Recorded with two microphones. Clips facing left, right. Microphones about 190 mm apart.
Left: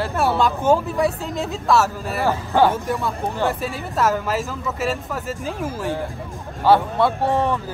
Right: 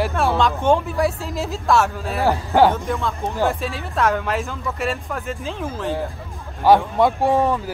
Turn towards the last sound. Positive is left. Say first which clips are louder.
# right 2 dB
turn(degrees=-10)  # may be behind; listen again after turning